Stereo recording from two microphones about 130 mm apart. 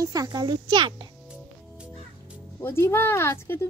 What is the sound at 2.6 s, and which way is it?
Speech, 20° left (ahead or behind).